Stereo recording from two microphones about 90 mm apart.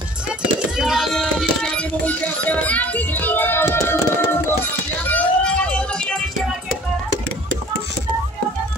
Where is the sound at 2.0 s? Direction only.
15° left (ahead or behind).